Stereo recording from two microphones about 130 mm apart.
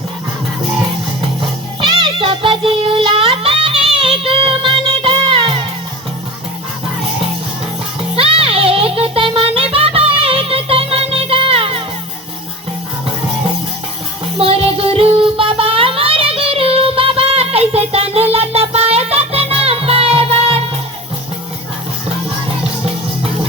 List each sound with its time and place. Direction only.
1.8 s music: 40° right (ahead or behind)
8.1 s music: 45° right (ahead or behind)
14.3 s music: 45° right (ahead or behind)